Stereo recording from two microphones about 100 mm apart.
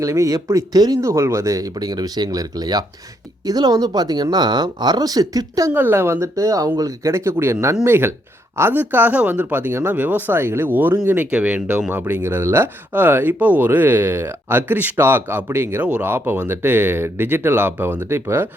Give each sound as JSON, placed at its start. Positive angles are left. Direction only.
{"t": 0.0, "sound": "speech", "side_deg": -30}
{"t": 5.7, "sound": "speech", "side_deg": -20}